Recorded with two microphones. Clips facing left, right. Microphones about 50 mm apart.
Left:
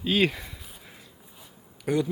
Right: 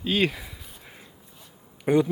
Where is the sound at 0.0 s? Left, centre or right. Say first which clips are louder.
Even; centre.